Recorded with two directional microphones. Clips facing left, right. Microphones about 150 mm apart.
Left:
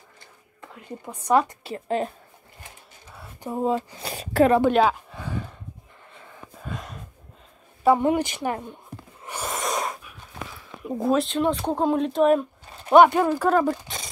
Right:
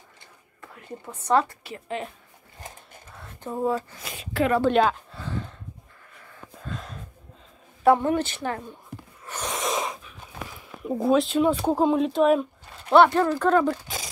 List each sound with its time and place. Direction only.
0.6 s a woman's voice: 15° left (ahead or behind)
1.6 s a woman's voice: 35° left (ahead or behind)
3.2 s speech: 15° left (ahead or behind)
4.0 s a woman's voice: 40° left (ahead or behind)
4.6 s speech: 5° left (ahead or behind)
5.1 s a sound: 10° left (ahead or behind)
6.6 s wheeze: 10° left (ahead or behind)
8.0 s speech: 15° left (ahead or behind)
9.2 s sneeze: 10° left (ahead or behind)
9.5 s sneeze: centre (ahead or behind)
10.8 s speech: centre (ahead or behind)
12.9 s speech: 15° left (ahead or behind)